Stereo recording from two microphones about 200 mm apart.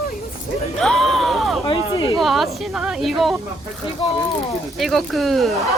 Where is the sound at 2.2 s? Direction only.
Centre (ahead or behind).